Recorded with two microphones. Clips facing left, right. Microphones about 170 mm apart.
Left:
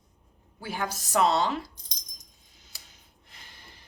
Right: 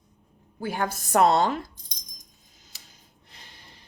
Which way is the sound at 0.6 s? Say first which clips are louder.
Right 4 dB; 50° right (ahead or behind).